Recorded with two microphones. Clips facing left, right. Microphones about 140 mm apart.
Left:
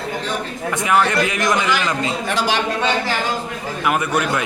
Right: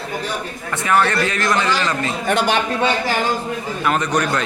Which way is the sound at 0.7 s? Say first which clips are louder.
Even; 15° left (ahead or behind).